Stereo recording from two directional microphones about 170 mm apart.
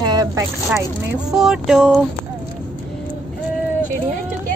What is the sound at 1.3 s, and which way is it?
Speech, 5° right (ahead or behind).